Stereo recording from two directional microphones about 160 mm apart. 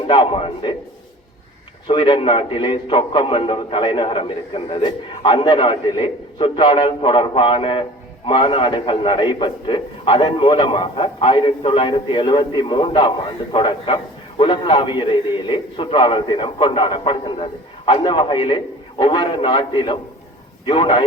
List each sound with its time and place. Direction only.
0.1 s a man's voice: 35° left (ahead or behind)
1.9 s a man's voice: 30° left (ahead or behind)